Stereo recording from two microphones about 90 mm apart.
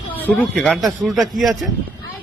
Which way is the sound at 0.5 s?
5° left (ahead or behind).